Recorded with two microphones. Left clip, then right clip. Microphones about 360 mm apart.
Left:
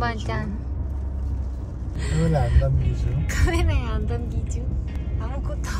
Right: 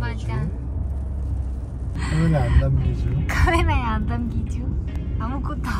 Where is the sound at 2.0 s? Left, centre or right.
Centre.